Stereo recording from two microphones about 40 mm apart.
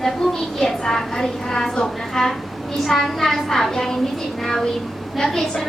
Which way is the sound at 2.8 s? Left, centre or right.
Centre.